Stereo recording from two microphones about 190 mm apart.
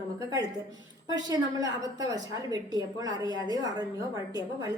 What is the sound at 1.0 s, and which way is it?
A woman's voice, 20° right (ahead or behind).